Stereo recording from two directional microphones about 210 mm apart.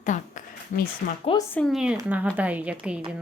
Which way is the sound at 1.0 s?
50° left (ahead or behind).